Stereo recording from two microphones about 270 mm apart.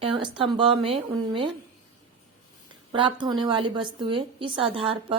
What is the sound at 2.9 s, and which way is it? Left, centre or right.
A woman's voice, centre.